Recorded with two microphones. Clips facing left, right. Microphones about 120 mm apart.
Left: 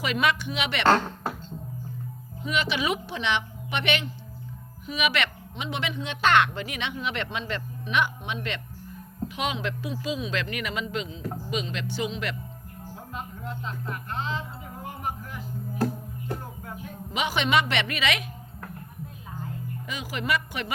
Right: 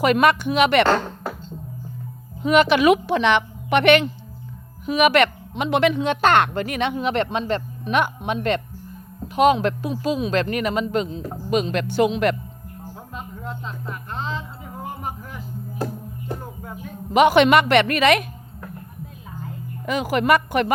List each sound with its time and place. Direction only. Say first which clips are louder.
0.0 s speech: right 9 dB; 50° right (ahead or behind)
2.4 s a woman's voice: right 12 dB; 60° right (ahead or behind)
17.2 s a woman's voice: right 11 dB; 65° right (ahead or behind)
19.8 s a woman's voice: right 14 dB; 55° right (ahead or behind)